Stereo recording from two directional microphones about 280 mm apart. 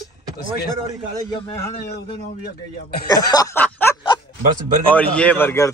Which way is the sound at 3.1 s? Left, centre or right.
Centre.